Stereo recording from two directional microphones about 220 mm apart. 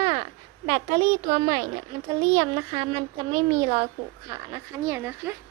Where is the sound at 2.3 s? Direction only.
25° right (ahead or behind).